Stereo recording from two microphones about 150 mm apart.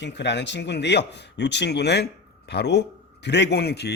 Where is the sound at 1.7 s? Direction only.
90° left.